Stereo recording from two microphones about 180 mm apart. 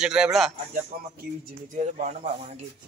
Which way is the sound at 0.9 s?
50° right (ahead or behind).